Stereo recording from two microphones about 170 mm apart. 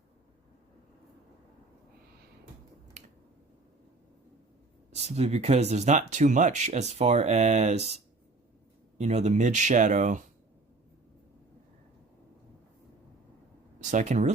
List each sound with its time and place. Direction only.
3.0 s finger snapping: 45° right (ahead or behind)
4.9 s speech: 40° right (ahead or behind)
13.8 s speech: 45° right (ahead or behind)